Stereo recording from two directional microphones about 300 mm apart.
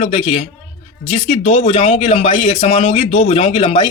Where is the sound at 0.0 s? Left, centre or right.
Left.